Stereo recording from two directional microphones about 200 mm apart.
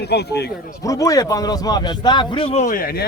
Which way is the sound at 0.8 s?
15° left (ahead or behind).